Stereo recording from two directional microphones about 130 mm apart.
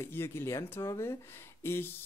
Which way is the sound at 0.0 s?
20° left (ahead or behind).